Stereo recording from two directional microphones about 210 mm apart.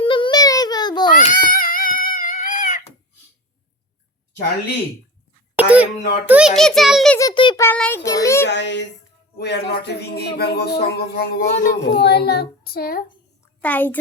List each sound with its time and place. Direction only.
0.0 s a sound: 25° left (ahead or behind)
1.1 s a sound: 40° left (ahead or behind)
5.5 s a child's voice: 5° right (ahead or behind)
7.2 s a child's voice: 20° left (ahead or behind)
8.4 s speech: 55° left (ahead or behind)
9.4 s music: 50° left (ahead or behind)
11.4 s speech: 35° left (ahead or behind)
11.9 s music: 50° left (ahead or behind)
13.6 s a child's voice: 5° left (ahead or behind)